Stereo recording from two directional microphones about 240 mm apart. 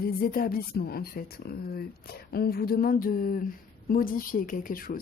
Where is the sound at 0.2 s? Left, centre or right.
Left.